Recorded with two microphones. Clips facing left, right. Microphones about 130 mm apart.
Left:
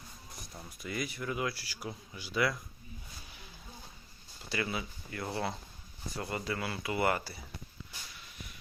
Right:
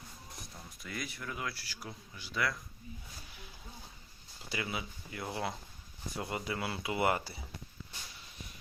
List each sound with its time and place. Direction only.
0.8 s speech: 5° left (ahead or behind)
4.4 s speech: 10° right (ahead or behind)